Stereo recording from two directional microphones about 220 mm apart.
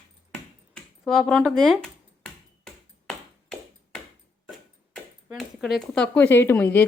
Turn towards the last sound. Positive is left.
turn(degrees=10)  # may be behind; listen again after turning